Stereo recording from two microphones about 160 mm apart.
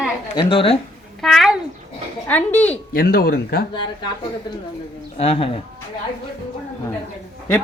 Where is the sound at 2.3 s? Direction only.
10° left (ahead or behind).